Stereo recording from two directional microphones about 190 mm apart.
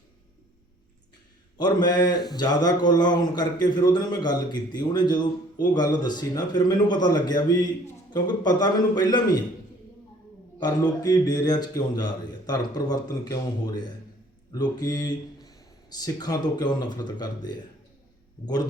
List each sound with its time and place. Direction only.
1.5 s a man's voice: 20° left (ahead or behind)
10.6 s a man's voice: 20° left (ahead or behind)
14.5 s speech: 20° left (ahead or behind)